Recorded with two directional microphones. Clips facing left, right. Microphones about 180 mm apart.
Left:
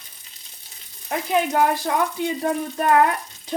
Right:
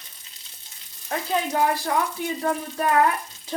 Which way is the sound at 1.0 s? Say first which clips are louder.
Left 4 dB; 15° left (ahead or behind).